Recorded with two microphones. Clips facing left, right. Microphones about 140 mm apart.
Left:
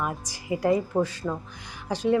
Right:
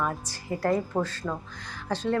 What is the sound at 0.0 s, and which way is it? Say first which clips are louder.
Speech: right 1 dB; 10° left (ahead or behind).